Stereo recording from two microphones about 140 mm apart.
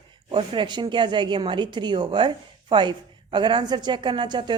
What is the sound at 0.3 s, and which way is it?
Speech, 35° right (ahead or behind).